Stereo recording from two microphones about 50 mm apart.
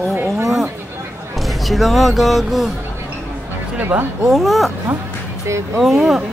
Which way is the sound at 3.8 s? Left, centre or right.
Right.